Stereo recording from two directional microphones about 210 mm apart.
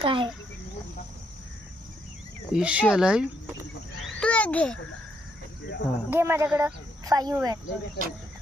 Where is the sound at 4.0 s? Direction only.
5° left (ahead or behind).